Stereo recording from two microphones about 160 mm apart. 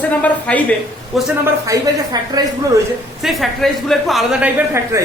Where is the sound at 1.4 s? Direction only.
20° right (ahead or behind).